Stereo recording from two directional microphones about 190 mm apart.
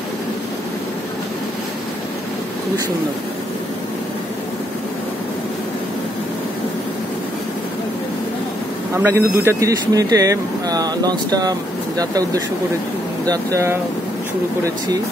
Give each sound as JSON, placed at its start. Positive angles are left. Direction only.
{"t": 8.9, "sound": "speech", "side_deg": -15}